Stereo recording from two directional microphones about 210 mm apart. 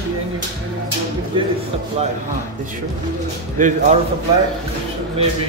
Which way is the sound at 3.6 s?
40° right (ahead or behind).